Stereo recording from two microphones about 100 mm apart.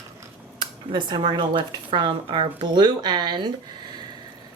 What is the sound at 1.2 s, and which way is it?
Speech, 60° right (ahead or behind).